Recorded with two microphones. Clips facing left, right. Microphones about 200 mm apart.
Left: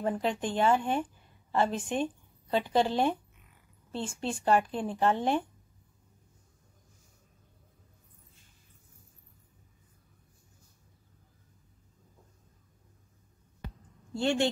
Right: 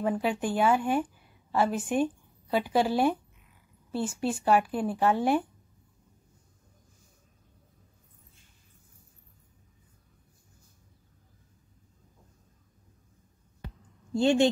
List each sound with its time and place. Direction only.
0.0 s speech: 5° right (ahead or behind)
14.1 s speech: 15° right (ahead or behind)